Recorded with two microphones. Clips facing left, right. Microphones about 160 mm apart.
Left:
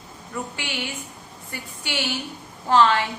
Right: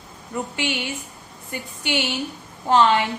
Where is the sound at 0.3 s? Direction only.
20° right (ahead or behind).